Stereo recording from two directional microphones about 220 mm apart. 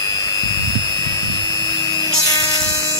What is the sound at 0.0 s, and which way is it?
Vacuum cleaner, 15° left (ahead or behind).